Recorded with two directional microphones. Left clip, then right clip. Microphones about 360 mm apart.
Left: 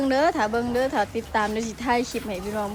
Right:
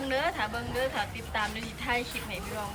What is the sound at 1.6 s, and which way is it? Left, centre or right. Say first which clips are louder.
Speech: left 7 dB; left.